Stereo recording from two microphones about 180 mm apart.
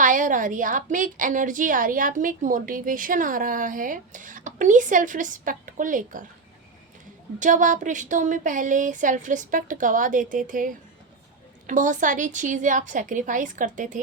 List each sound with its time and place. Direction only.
0.0 s a woman's voice: 45° right (ahead or behind)
7.3 s a woman's voice: 45° right (ahead or behind)